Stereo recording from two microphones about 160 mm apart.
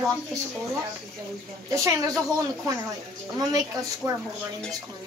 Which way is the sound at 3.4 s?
25° right (ahead or behind).